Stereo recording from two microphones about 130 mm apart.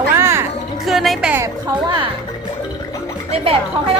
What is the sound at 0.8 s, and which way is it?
Speech, centre (ahead or behind).